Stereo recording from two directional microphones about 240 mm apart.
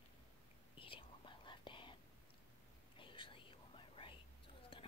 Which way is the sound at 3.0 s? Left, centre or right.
Left.